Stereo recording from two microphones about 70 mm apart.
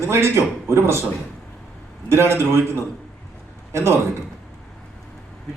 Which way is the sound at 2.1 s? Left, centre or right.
Right.